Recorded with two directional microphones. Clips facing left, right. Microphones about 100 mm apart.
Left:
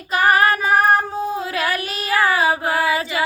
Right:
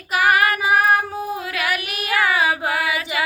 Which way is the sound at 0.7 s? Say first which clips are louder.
Left 2 dB; 30° left (ahead or behind).